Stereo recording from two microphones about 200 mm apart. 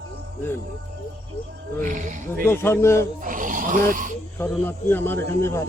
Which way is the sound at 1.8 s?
40° right (ahead or behind).